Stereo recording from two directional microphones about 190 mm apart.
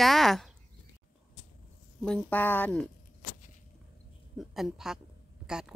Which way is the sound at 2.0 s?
5° left (ahead or behind).